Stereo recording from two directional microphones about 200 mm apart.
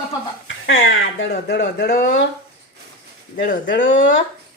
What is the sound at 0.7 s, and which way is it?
Speech, 65° left (ahead or behind).